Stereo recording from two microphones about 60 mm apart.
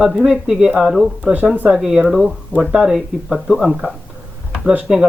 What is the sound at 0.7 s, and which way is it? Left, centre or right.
Speech, centre.